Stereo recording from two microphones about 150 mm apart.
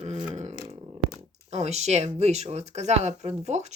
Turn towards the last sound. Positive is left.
turn(degrees=-50)  # may be behind; listen again after turning